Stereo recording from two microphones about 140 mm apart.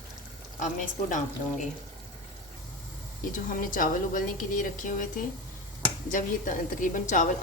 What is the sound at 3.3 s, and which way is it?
A woman's voice, 70° left (ahead or behind).